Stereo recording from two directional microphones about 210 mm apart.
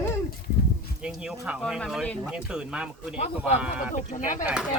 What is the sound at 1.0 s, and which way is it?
Speech, 5° right (ahead or behind).